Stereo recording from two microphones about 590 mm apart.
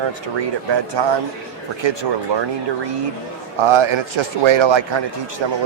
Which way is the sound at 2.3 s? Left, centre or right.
Right.